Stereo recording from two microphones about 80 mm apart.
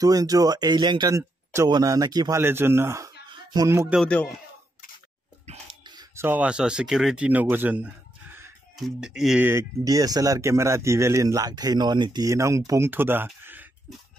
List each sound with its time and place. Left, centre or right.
0.0 s speech: right
1.1 s a sound: right
1.9 s speech: right
2.3 s a man's voice: right
4.0 s speech: centre
6.3 s speech: centre
7.2 s speech: right
8.7 s speech: centre
9.4 s a man's voice: right
9.8 s speech: right
12.3 s a man's voice: right
12.9 s speech: right